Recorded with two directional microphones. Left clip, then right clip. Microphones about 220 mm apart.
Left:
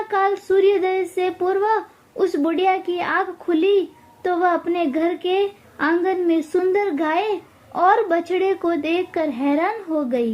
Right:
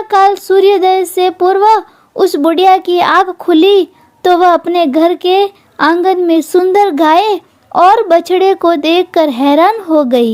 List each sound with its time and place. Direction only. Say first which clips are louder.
0.1 s speech: right 12 dB; 45° right (ahead or behind)